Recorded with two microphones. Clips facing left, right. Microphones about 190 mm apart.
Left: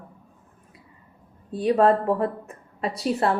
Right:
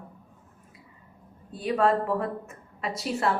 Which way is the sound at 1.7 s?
35° left (ahead or behind).